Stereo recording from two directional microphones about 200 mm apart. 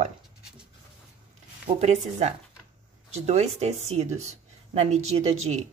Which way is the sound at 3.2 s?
30° right (ahead or behind).